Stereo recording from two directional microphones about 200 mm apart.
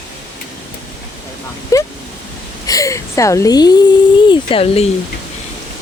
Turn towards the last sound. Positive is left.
turn(degrees=30)  # may be behind; listen again after turning